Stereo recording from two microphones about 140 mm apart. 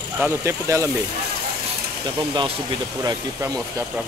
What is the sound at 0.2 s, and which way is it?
Speech, 20° right (ahead or behind).